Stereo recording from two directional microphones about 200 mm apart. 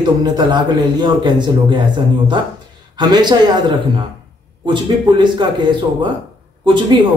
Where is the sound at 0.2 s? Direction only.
20° right (ahead or behind).